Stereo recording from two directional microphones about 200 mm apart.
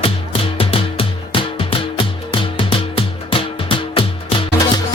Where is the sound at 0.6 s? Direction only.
25° left (ahead or behind).